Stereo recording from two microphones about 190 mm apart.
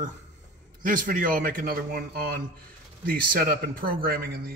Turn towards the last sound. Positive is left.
turn(degrees=-50)  # may be behind; listen again after turning